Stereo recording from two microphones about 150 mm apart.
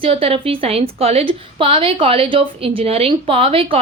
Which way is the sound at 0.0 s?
40° right (ahead or behind).